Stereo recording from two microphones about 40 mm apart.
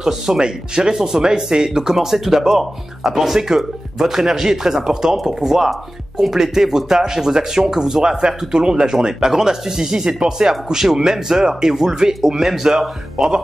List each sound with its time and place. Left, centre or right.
0.0 s speech: centre